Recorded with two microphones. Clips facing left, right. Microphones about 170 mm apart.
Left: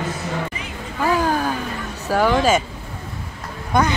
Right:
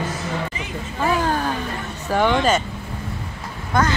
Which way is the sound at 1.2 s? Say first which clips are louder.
Left 1 dB; 5° left (ahead or behind).